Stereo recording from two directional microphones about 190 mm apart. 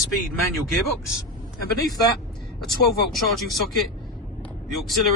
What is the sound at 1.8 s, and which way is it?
Speech, 20° left (ahead or behind).